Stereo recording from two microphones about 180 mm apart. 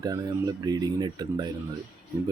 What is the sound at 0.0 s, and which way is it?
Speech, 20° right (ahead or behind).